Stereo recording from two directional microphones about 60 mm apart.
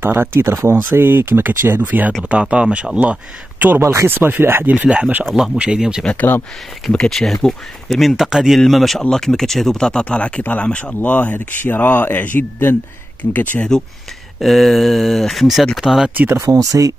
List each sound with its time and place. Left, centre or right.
0.0 s speech: right
1.8 s speech: right
3.8 s speech: right
4.1 s speech: right
4.6 s speech: right
5.6 s speech: centre
6.9 s speech: centre; by 13.6 s left
13.6 s speech: centre
14.4 s speech: centre
16.4 s speech: right